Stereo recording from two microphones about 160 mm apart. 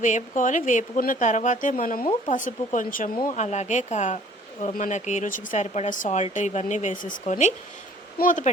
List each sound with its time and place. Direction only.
0.0 s speech: 50° left (ahead or behind)